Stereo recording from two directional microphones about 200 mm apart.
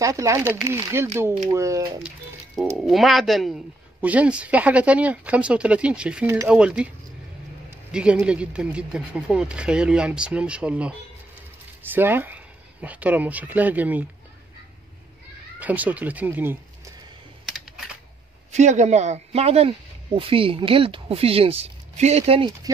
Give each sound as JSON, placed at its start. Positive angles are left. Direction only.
{"t": 0.0, "sound": "speech", "side_deg": -15}
{"t": 2.0, "sound": "speech", "side_deg": -5}
{"t": 7.9, "sound": "speech", "side_deg": -5}
{"t": 15.6, "sound": "speech", "side_deg": -5}
{"t": 18.5, "sound": "a man's voice", "side_deg": -35}